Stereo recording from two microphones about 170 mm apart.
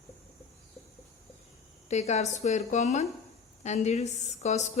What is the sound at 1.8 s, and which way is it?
A woman's voice, 40° left (ahead or behind).